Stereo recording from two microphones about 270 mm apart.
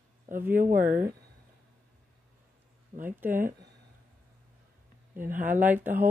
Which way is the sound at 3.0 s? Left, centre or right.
Centre.